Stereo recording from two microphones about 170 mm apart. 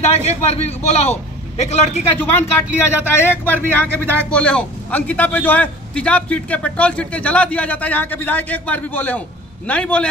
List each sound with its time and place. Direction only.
0.0 s a man's voice: 40° left (ahead or behind)
2.1 s speech: 10° left (ahead or behind)